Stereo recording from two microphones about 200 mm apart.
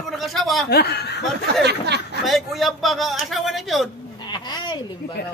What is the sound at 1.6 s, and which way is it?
Snicker, 55° right (ahead or behind).